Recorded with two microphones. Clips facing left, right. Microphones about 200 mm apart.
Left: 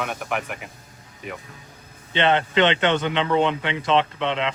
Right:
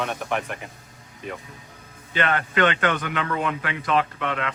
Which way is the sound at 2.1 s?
25° left (ahead or behind).